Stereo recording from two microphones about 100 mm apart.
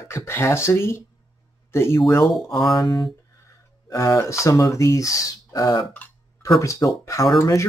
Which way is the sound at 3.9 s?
30° left (ahead or behind).